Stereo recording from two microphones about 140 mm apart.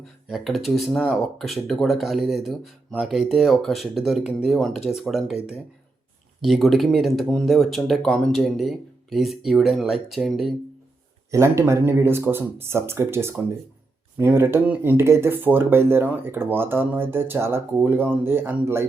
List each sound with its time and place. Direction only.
0.3 s speech: centre (ahead or behind)
6.4 s speech: centre (ahead or behind)
11.3 s speech: 20° right (ahead or behind)